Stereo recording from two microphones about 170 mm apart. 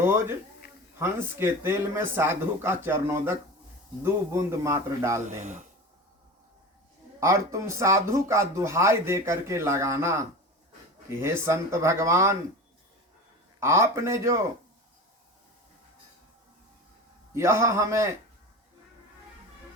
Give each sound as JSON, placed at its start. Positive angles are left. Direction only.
{"t": 0.0, "sound": "speech", "side_deg": -15}
{"t": 5.4, "sound": "speech", "side_deg": -45}
{"t": 7.2, "sound": "speech", "side_deg": -15}
{"t": 13.6, "sound": "speech", "side_deg": -15}
{"t": 17.3, "sound": "speech", "side_deg": -15}